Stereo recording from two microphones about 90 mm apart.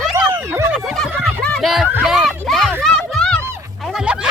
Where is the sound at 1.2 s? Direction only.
10° left (ahead or behind).